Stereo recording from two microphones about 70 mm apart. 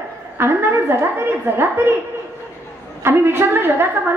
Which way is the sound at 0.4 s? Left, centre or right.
Right.